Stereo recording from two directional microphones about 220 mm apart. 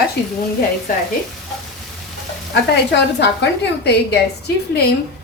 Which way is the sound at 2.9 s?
50° left (ahead or behind).